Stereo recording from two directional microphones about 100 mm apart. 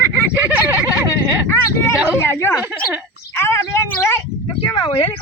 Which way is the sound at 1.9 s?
10° right (ahead or behind).